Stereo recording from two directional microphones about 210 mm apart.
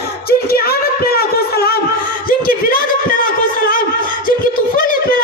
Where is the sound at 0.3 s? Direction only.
45° left (ahead or behind).